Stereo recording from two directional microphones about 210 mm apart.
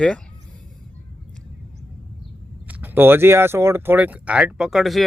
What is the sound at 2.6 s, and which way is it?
Speech, 10° right (ahead or behind).